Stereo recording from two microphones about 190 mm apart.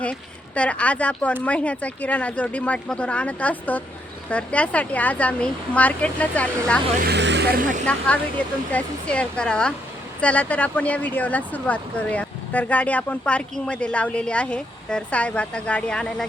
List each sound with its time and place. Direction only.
0.0 s speech: 5° left (ahead or behind)
7.0 s speech: 65° right (ahead or behind); by 7.9 s 45° right (ahead or behind)
7.9 s speech: 5° left (ahead or behind)